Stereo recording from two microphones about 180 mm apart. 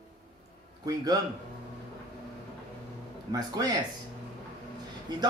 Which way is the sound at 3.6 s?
20° right (ahead or behind).